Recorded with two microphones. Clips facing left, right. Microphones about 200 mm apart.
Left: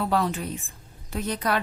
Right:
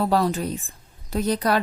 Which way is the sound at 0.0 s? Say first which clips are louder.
Right 4 dB; 35° right (ahead or behind).